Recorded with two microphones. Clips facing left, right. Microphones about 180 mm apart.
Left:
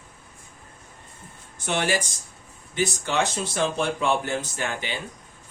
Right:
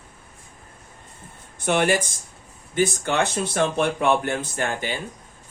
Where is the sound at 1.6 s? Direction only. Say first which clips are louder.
Right 5 dB; 55° right (ahead or behind).